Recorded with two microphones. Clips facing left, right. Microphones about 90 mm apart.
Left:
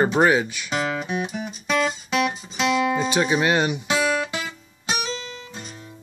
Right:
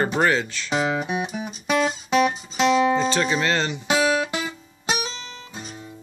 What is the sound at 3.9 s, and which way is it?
Music, 5° right (ahead or behind).